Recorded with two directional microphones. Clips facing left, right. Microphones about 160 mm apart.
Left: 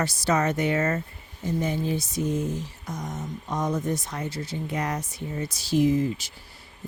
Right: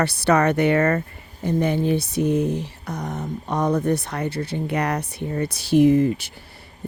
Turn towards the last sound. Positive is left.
turn(degrees=-60)  # may be behind; listen again after turning